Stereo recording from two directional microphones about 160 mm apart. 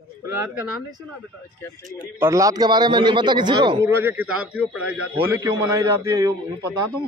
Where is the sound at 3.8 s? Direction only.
15° right (ahead or behind).